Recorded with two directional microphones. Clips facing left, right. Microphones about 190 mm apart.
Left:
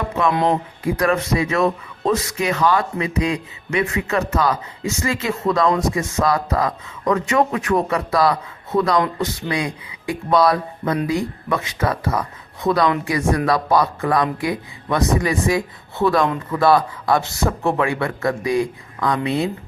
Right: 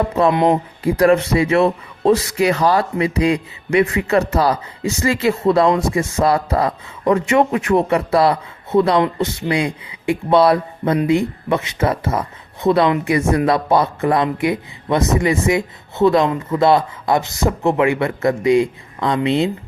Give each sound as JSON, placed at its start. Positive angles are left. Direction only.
{"t": 0.9, "sound": "speech", "side_deg": -30}